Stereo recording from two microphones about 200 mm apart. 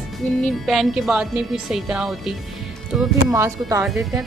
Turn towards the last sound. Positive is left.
turn(degrees=-15)  # may be behind; listen again after turning